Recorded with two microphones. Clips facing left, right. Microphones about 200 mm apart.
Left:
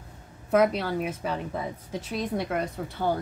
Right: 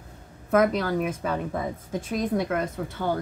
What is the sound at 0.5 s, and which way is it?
Speech, 50° right (ahead or behind).